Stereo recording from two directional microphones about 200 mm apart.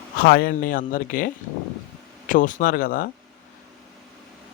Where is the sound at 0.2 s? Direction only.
50° left (ahead or behind).